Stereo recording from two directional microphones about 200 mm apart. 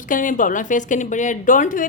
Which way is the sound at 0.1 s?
40° left (ahead or behind).